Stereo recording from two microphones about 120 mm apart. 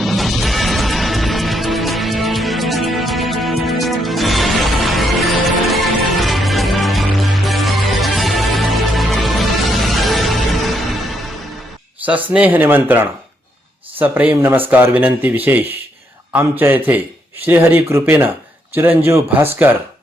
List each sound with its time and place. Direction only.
0.0 s music: centre (ahead or behind)
12.0 s speech: 10° right (ahead or behind)